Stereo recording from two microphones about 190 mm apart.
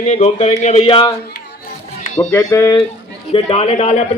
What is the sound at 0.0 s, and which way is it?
Speech, 35° left (ahead or behind).